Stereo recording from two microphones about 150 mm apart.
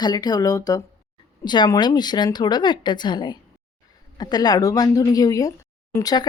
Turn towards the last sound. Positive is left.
turn(degrees=25)  # may be behind; listen again after turning